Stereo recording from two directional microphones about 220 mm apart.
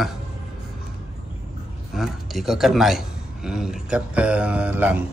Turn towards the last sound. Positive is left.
turn(degrees=-5)  # may be behind; listen again after turning